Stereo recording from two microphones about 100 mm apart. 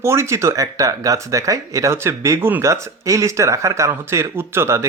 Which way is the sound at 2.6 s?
30° right (ahead or behind).